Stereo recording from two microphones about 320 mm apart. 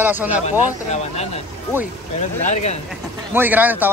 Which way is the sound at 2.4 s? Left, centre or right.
Left.